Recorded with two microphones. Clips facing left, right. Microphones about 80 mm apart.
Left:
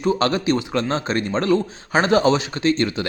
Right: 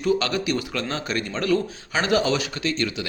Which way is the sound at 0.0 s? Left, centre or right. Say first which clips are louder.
Left 3 dB; left.